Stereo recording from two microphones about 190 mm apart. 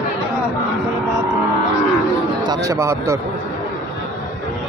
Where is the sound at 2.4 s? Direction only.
20° right (ahead or behind).